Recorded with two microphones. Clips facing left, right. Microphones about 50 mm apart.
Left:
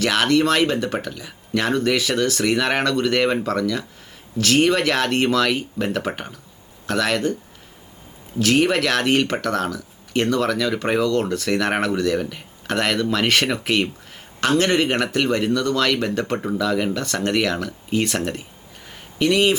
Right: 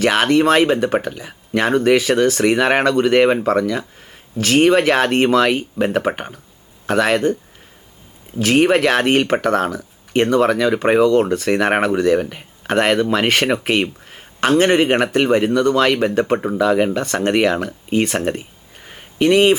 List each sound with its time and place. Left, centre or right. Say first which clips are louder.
0.0 s speech: right 4 dB; centre
8.4 s speech: right 4 dB; right
18.9 s a sound: right 5 dB; right